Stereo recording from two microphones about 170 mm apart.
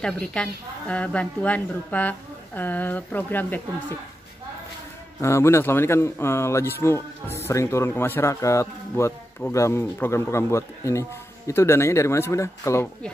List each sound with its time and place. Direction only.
0.0 s speech: 5° left (ahead or behind)
5.2 s speech: 15° left (ahead or behind)